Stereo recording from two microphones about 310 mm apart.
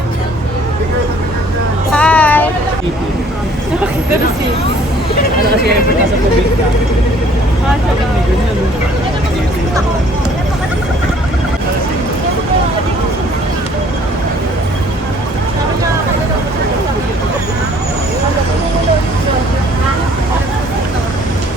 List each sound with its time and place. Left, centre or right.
1.9 s music: centre